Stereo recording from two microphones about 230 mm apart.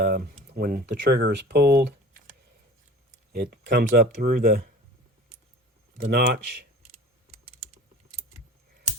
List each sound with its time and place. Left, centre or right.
0.5 s speech: right
3.3 s speech: right
6.0 s speech: right